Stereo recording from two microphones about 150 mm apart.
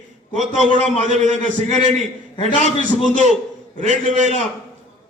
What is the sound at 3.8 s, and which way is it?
Speech, 55° right (ahead or behind).